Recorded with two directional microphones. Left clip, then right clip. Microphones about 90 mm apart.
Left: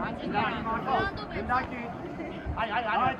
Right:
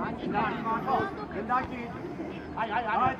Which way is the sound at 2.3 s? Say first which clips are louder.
Even; 25° left (ahead or behind).